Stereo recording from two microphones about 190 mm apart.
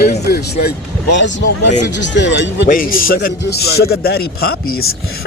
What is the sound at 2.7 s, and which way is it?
A man's voice, 50° left (ahead or behind).